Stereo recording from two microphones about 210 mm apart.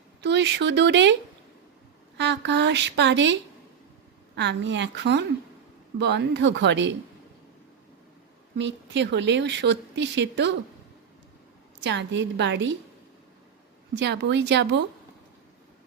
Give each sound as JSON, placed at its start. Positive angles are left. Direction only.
{"t": 0.2, "sound": "speech", "side_deg": -55}
{"t": 2.1, "sound": "speech", "side_deg": -55}
{"t": 4.4, "sound": "speech", "side_deg": -60}
{"t": 8.5, "sound": "speech", "side_deg": -55}
{"t": 11.8, "sound": "speech", "side_deg": -60}
{"t": 13.9, "sound": "speech", "side_deg": -55}